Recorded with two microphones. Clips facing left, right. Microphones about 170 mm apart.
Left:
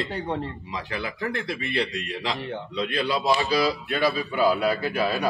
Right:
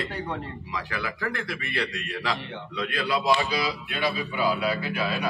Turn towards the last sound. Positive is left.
turn(degrees=45)  # may be behind; listen again after turning